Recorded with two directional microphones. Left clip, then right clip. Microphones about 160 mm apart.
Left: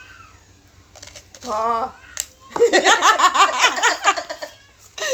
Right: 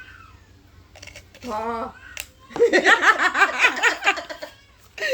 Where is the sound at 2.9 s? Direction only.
25° right (ahead or behind).